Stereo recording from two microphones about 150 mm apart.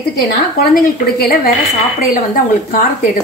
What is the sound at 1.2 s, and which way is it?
Speech, 90° left.